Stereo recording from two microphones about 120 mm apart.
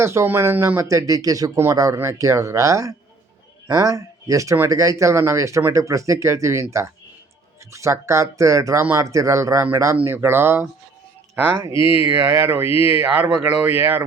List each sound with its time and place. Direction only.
0.0 s speech: 25° right (ahead or behind)
11.7 s speech: 45° left (ahead or behind)
11.9 s speech: 25° right (ahead or behind)